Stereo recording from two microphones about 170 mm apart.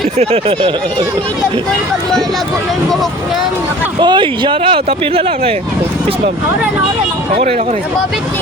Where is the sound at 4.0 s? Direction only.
30° right (ahead or behind).